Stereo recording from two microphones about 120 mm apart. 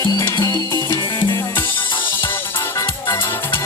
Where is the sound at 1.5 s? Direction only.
15° left (ahead or behind).